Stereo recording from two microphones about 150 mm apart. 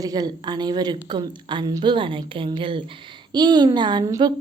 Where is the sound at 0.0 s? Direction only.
25° right (ahead or behind).